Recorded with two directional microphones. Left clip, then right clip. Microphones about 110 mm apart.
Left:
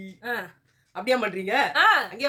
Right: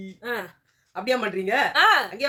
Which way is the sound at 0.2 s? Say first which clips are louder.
Even; 10° right (ahead or behind).